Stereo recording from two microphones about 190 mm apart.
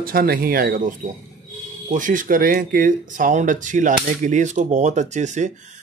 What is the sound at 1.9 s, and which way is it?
Speech, 45° right (ahead or behind).